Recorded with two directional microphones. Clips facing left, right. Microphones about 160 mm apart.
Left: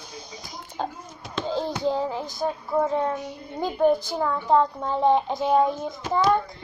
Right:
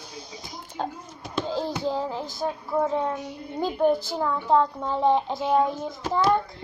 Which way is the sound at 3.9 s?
15° left (ahead or behind).